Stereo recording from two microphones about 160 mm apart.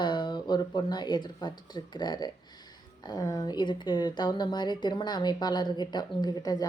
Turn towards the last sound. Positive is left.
turn(degrees=25)  # may be behind; listen again after turning